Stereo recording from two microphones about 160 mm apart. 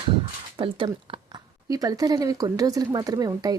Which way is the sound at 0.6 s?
30° right (ahead or behind).